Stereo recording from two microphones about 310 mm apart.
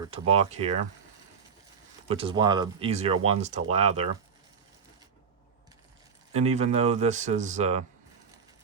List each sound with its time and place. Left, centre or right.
0.0 s speech: centre
2.0 s speech: centre
6.3 s speech: right